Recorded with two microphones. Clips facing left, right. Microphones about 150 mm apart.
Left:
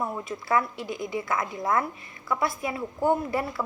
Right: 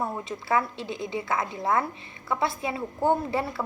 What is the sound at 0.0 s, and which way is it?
Speech, 25° right (ahead or behind).